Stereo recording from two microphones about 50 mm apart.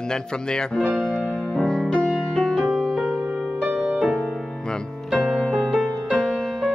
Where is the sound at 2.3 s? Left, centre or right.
Centre.